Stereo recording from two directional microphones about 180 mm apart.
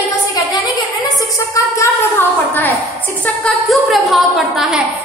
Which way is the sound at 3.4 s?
Centre (ahead or behind).